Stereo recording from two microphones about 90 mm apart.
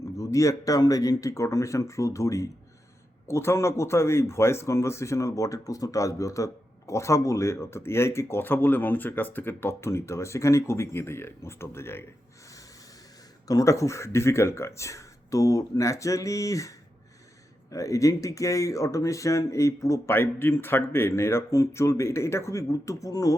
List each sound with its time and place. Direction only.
0.2 s speech: 35° left (ahead or behind)
13.5 s speech: 35° left (ahead or behind)